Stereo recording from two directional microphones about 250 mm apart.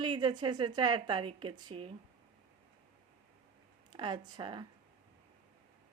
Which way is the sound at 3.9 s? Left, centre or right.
Centre.